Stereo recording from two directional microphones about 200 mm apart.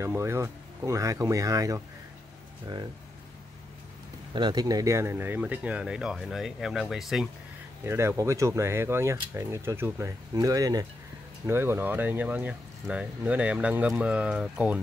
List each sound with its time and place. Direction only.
0.0 s speech: 15° right (ahead or behind)
4.3 s speech: 20° right (ahead or behind); by 7.2 s centre (ahead or behind)
7.8 s speech: 10° right (ahead or behind)